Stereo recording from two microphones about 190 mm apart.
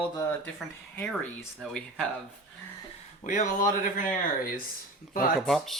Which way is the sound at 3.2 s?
40° left (ahead or behind).